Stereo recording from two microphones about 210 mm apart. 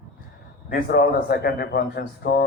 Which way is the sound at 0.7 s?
45° left (ahead or behind).